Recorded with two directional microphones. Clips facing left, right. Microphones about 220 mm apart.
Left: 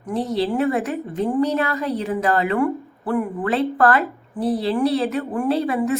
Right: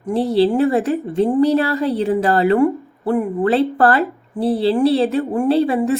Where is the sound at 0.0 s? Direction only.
30° right (ahead or behind).